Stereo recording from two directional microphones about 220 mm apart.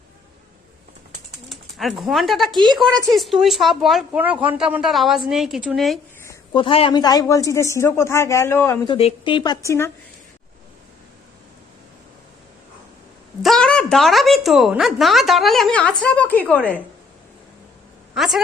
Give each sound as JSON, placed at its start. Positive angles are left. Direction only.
{"t": 1.5, "sound": "a woman's voice", "side_deg": 0}
{"t": 6.2, "sound": "a woman's voice", "side_deg": 20}
{"t": 9.0, "sound": "a woman's voice", "side_deg": 25}
{"t": 13.4, "sound": "a woman's voice", "side_deg": 0}
{"t": 18.1, "sound": "a woman's voice", "side_deg": 0}